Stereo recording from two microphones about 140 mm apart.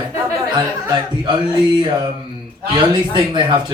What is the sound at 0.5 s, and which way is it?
Speech, 35° right (ahead or behind).